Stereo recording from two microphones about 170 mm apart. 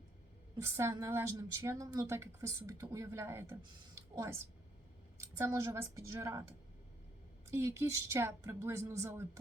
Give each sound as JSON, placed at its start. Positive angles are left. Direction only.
{"t": 0.6, "sound": "a woman's voice", "side_deg": -15}
{"t": 7.5, "sound": "a woman's voice", "side_deg": -15}